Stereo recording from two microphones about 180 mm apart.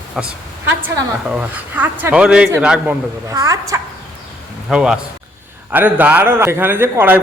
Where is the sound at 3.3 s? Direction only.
20° right (ahead or behind).